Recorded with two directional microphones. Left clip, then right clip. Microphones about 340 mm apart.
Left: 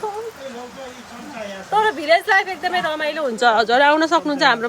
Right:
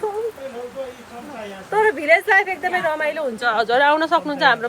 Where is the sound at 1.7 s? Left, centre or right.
Centre.